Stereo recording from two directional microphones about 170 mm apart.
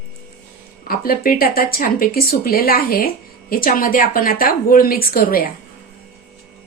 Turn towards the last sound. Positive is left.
turn(degrees=60)  # may be behind; listen again after turning